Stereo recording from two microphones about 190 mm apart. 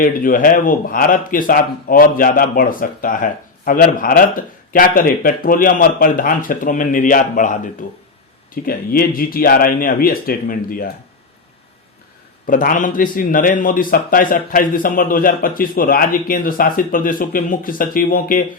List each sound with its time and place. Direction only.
0.0 s speech: 45° left (ahead or behind)
12.5 s speech: 45° left (ahead or behind)